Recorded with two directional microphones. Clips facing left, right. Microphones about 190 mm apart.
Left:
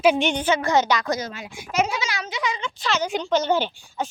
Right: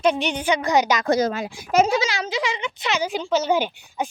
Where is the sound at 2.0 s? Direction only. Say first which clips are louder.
Right 3 dB; 30° right (ahead or behind).